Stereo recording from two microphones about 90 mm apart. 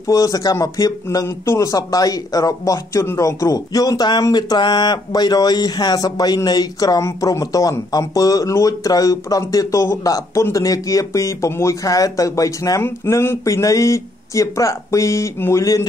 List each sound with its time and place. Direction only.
0.0 s speech: 40° left (ahead or behind)